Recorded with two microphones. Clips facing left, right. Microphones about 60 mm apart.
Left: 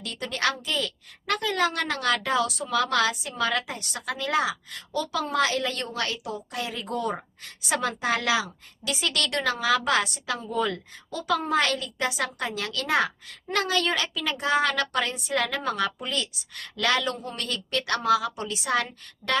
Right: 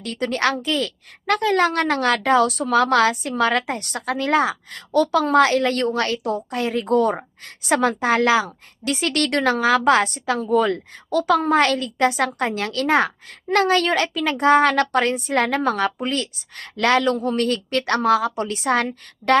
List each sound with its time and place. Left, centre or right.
0.0 s a woman's voice: right
10.3 s a woman's voice: right